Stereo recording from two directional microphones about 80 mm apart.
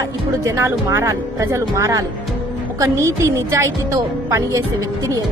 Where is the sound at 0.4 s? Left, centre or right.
Right.